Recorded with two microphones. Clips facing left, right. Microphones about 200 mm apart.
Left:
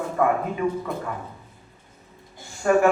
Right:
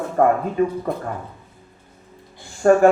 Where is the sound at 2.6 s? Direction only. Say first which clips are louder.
Right 5 dB; 45° right (ahead or behind).